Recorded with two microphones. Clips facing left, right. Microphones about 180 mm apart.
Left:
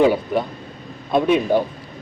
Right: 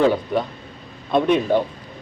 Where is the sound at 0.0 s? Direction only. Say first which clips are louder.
Left 2 dB; 5° left (ahead or behind).